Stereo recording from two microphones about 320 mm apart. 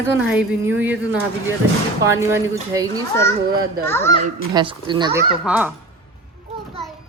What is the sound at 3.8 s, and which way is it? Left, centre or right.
Speech, centre.